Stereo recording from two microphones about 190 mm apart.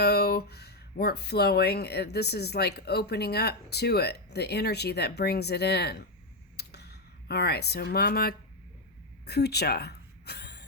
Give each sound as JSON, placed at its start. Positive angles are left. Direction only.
{"t": 0.0, "sound": "a woman's voice", "side_deg": 60}